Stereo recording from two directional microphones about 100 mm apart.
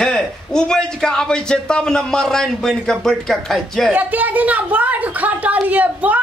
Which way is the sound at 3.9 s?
15° right (ahead or behind).